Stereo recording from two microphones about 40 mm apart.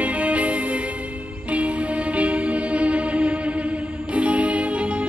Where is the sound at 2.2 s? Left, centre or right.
Right.